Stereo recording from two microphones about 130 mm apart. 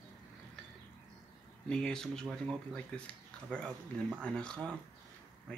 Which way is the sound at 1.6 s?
5° left (ahead or behind).